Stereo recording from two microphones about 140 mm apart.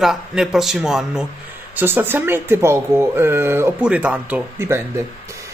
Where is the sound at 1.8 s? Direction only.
15° right (ahead or behind).